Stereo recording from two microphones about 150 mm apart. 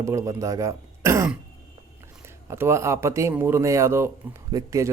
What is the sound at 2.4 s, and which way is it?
Speech, 15° right (ahead or behind).